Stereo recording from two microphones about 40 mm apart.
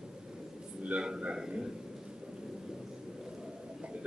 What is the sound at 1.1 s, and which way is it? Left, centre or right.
Speech, right.